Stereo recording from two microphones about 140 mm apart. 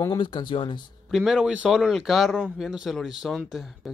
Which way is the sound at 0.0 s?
30° left (ahead or behind).